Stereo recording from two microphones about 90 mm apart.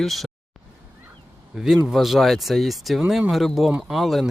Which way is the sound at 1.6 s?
5° right (ahead or behind).